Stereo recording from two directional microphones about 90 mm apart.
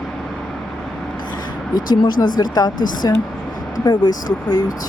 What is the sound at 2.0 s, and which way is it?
Speech, 55° left (ahead or behind).